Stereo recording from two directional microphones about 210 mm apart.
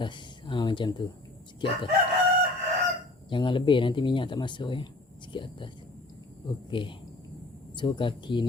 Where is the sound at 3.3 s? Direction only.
25° left (ahead or behind).